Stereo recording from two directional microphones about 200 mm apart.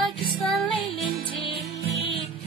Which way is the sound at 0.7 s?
25° left (ahead or behind).